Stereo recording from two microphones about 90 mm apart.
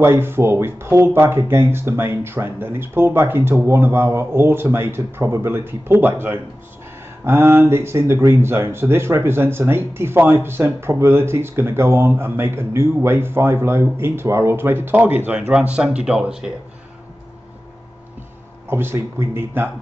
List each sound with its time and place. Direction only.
0.0 s speech: 25° right (ahead or behind); by 16.5 s 5° right (ahead or behind)
18.7 s speech: 25° right (ahead or behind)